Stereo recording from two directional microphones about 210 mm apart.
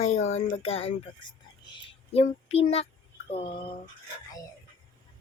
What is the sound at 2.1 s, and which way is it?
Child singing, 30° left (ahead or behind).